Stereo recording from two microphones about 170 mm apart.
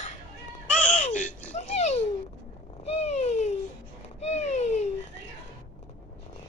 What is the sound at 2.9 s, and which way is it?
Cat, 40° left (ahead or behind).